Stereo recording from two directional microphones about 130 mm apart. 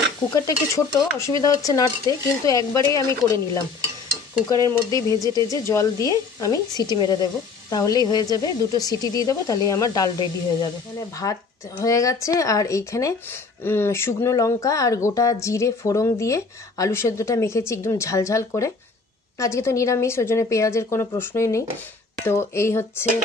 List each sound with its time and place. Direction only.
0.3 s speech: 30° left (ahead or behind)
11.2 s speech: 25° left (ahead or behind)